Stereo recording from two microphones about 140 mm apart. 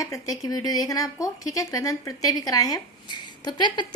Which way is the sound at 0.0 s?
25° left (ahead or behind).